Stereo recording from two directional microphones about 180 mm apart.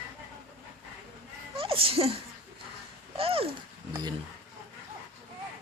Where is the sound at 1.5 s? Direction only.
30° right (ahead or behind).